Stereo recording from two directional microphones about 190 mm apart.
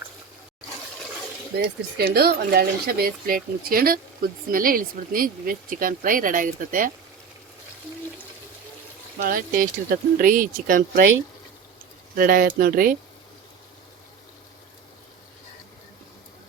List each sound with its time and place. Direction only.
1.5 s speech: 55° right (ahead or behind)
9.2 s speech: 45° right (ahead or behind)
12.1 s speech: 50° right (ahead or behind)